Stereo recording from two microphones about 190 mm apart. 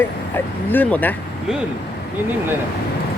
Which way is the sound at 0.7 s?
10° left (ahead or behind).